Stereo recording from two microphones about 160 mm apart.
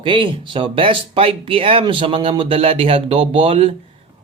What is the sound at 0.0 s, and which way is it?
Speech, 30° right (ahead or behind).